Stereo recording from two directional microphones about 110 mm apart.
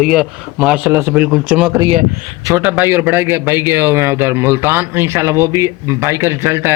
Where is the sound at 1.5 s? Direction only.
10° right (ahead or behind).